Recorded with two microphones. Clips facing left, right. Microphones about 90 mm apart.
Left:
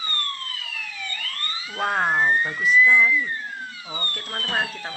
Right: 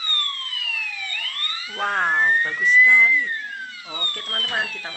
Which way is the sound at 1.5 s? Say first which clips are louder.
Even; 5° left (ahead or behind).